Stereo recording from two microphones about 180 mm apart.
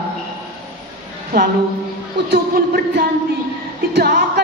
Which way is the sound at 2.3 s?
60° right (ahead or behind).